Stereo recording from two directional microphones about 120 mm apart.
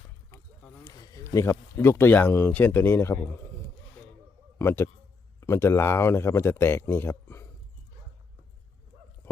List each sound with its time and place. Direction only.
0.9 s speech: 30° left (ahead or behind)
4.5 s a man's voice: 20° left (ahead or behind)